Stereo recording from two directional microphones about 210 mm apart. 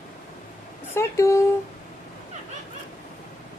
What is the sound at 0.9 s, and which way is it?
Speech, 15° left (ahead or behind).